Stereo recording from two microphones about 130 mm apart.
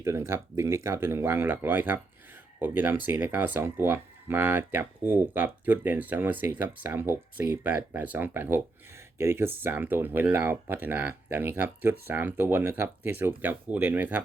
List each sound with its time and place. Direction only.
0.0 s speech: 20° right (ahead or behind)